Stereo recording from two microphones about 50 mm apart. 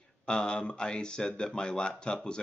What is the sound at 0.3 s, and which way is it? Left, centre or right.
Speech, centre.